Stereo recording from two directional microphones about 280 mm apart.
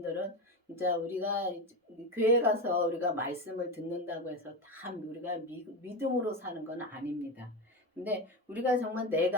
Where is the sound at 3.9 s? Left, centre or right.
Centre.